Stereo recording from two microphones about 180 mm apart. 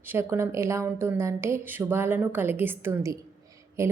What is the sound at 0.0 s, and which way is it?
A woman's voice, 10° right (ahead or behind).